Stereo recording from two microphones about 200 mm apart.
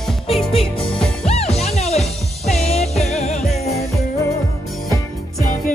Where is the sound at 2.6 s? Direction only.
35° left (ahead or behind).